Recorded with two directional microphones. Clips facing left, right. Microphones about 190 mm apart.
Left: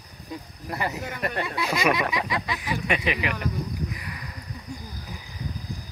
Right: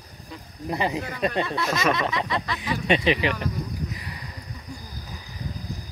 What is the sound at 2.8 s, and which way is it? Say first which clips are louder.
Speech: right 7 dB; 25° right (ahead or behind).